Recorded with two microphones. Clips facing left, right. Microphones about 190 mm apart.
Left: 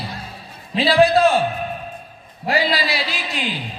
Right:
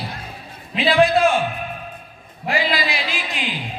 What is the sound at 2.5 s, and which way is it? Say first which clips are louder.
A man's voice: left 2 dB; 35° left (ahead or behind).